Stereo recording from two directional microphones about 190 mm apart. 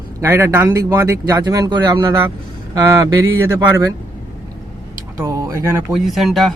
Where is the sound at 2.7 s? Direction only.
20° right (ahead or behind).